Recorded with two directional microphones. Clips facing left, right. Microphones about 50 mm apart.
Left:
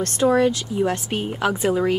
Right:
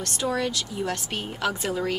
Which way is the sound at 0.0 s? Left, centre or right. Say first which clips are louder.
Left 9 dB; left.